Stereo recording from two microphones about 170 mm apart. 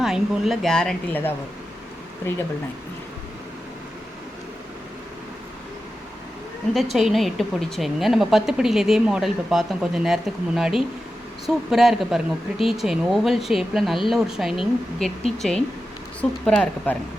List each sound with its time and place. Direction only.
0.0 s a woman's voice: centre (ahead or behind)
6.9 s a woman's voice: centre (ahead or behind)